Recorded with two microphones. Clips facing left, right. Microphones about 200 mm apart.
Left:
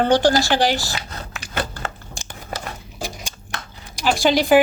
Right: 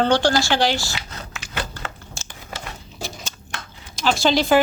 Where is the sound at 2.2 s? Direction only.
15° left (ahead or behind).